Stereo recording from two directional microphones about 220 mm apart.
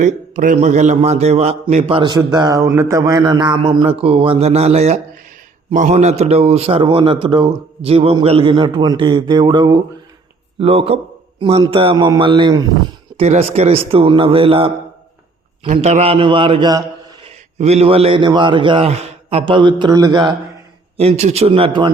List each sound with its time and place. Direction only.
0.0 s a man's voice: 35° right (ahead or behind); by 12.7 s 20° right (ahead or behind)
13.1 s a man's voice: 30° right (ahead or behind)